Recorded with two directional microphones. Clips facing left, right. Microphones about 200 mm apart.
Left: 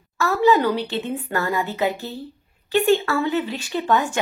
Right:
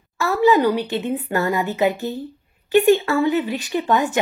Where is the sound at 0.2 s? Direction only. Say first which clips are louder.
Right 2 dB; 15° right (ahead or behind).